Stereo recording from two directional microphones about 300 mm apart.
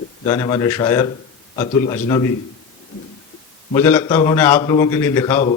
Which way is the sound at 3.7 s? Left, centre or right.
Centre.